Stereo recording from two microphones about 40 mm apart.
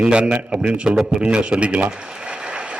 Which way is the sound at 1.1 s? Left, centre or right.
Right.